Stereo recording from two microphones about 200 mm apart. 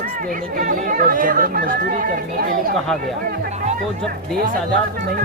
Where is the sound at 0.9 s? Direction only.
45° right (ahead or behind).